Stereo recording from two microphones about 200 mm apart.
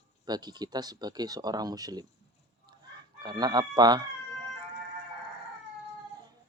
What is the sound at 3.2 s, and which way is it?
Speech, 20° right (ahead or behind).